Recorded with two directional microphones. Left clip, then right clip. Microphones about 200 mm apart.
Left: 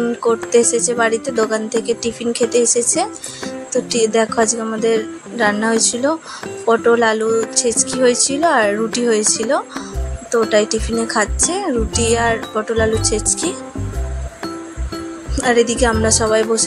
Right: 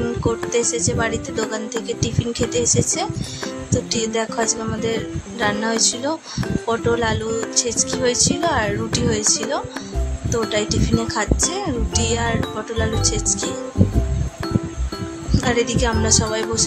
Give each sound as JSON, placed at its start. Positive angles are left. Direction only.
{"t": 0.2, "sound": "speech", "side_deg": 20}
{"t": 15.4, "sound": "speech", "side_deg": 20}